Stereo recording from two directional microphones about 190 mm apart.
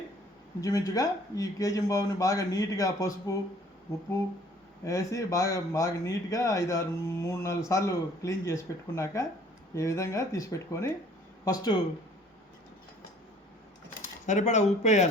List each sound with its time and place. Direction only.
0.6 s speech: 15° left (ahead or behind)
4.9 s speech: 15° left (ahead or behind)
14.3 s speech: 40° left (ahead or behind)